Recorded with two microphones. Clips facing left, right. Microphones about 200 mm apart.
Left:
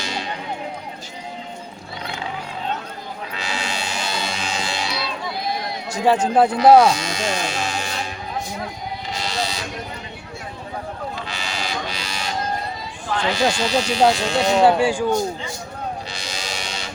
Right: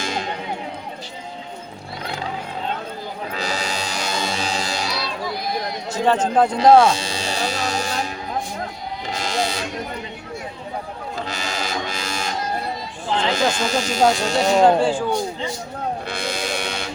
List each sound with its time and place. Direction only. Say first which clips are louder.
0.0 s music: right 3 dB; 50° right (ahead or behind)
3.3 s music: right 2 dB; 40° right (ahead or behind)
5.9 s speech: left 1 dB; 10° left (ahead or behind)
6.9 s music: left 2 dB; 30° right (ahead or behind)
9.2 s sheep: right 4 dB; 50° right (ahead or behind)
11.3 s a sound: right 2 dB; 45° right (ahead or behind)
13.3 s speech: left 3 dB; 45° right (ahead or behind)
14.6 s a man's voice: even; 10° left (ahead or behind)
16.0 s sheep: right 6 dB; 55° right (ahead or behind)